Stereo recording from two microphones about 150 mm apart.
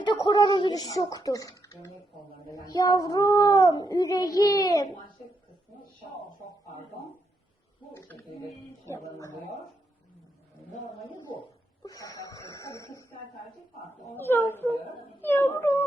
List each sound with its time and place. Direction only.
0.0 s speech: 30° left (ahead or behind)
2.6 s child singing: 25° left (ahead or behind)
7.9 s speech: 15° left (ahead or behind)
8.9 s child singing: 20° left (ahead or behind)
11.9 s child singing: 20° left (ahead or behind)
14.2 s a woman's voice: 15° left (ahead or behind)